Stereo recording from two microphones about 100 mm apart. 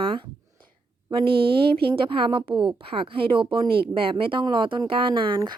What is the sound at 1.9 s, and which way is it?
A woman's voice, 60° right (ahead or behind).